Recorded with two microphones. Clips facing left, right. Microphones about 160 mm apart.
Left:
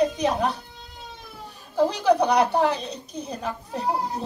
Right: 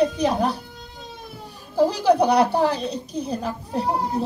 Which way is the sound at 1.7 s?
30° right (ahead or behind).